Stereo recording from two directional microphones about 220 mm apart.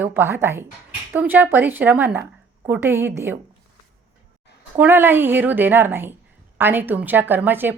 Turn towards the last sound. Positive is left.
turn(degrees=-10)  # may be behind; listen again after turning